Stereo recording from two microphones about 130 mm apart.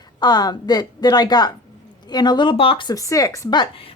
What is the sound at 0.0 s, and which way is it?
A woman's voice, 30° left (ahead or behind).